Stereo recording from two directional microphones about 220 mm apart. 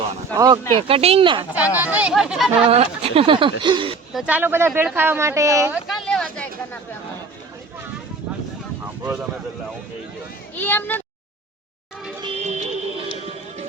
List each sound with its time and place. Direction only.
0.3 s speech: 15° right (ahead or behind)
1.5 s speech: 5° right (ahead or behind)
2.6 s speech: 25° right (ahead or behind)
4.1 s speech: 5° right (ahead or behind)
6.1 s a sound: 5° left (ahead or behind)
10.5 s speech: 5° left (ahead or behind)
12.2 s music: 30° right (ahead or behind)